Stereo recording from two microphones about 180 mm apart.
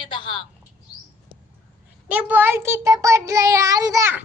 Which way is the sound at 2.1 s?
10° right (ahead or behind).